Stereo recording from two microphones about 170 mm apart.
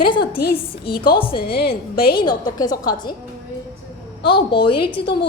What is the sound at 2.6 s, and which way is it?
Speech, 25° left (ahead or behind).